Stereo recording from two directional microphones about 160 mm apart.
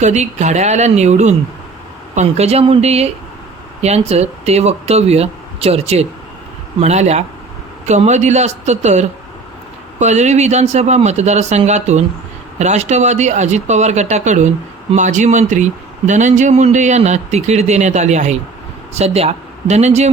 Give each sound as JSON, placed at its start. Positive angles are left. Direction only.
{"t": 0.0, "sound": "speech", "side_deg": -45}